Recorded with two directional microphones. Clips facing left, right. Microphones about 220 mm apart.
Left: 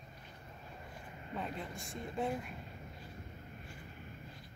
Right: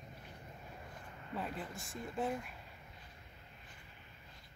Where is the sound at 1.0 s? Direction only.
20° left (ahead or behind).